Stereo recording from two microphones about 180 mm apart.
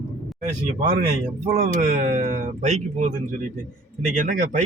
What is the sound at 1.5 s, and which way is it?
Speech, 45° right (ahead or behind).